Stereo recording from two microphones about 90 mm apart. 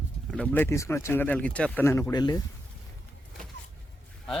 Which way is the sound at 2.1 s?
50° left (ahead or behind).